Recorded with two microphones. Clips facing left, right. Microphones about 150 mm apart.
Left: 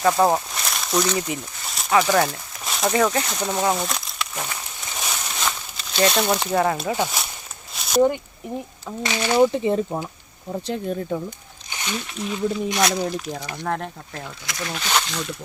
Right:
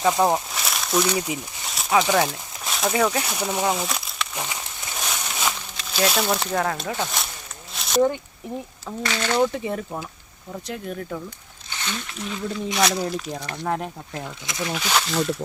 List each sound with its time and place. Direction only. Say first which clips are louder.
0.3 s speech: left 1 dB; centre (ahead or behind)
4.9 s a sound: even; 5° left (ahead or behind)
9.0 s speech: left 4 dB; 15° left (ahead or behind)
9.6 s speech: left 6 dB; 25° left (ahead or behind)
11.7 s speech: left 2 dB; 15° left (ahead or behind)
12.6 s speech: left 1 dB; centre (ahead or behind)
14.1 s speech: right 2 dB; 20° right (ahead or behind)
14.7 s speech: right 1 dB; 5° right (ahead or behind)